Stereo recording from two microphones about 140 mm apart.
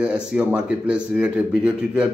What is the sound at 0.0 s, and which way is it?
A man's voice, 5° right (ahead or behind).